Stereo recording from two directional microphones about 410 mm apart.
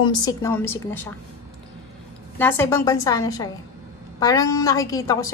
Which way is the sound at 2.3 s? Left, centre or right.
Centre.